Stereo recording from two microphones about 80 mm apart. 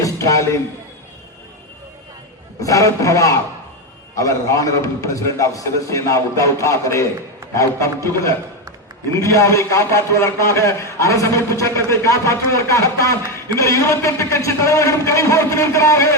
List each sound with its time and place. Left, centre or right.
0.0 s music: left
2.6 s a man's voice: left